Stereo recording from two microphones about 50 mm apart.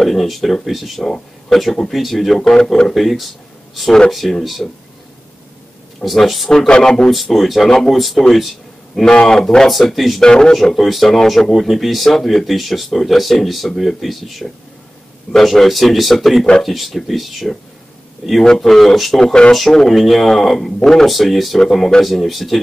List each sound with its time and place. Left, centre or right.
0.0 s speech: centre
6.0 s speech: centre
6.5 s speech: centre
7.1 s speech: centre
9.0 s speech: centre
10.2 s speech: centre
10.5 s speech: centre